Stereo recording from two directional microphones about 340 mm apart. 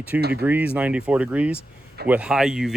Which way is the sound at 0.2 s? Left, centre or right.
Right.